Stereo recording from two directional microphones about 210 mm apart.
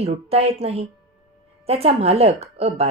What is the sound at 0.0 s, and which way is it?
Speech, 30° right (ahead or behind).